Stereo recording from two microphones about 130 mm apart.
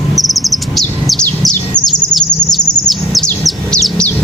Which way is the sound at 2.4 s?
30° left (ahead or behind).